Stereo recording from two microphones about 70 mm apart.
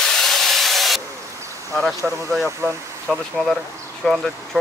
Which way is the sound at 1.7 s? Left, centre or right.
Centre.